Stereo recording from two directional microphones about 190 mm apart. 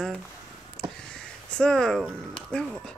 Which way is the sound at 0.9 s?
5° left (ahead or behind).